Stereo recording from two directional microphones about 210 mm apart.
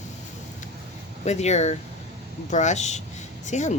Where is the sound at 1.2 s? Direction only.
30° left (ahead or behind).